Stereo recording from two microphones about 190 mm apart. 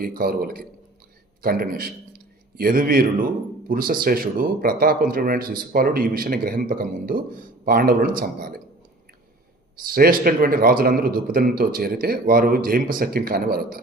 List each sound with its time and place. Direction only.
0.0 s a man's voice: 50° right (ahead or behind)
9.7 s speech: 50° right (ahead or behind)